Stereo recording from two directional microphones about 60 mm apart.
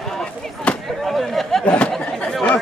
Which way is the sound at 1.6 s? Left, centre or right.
Centre.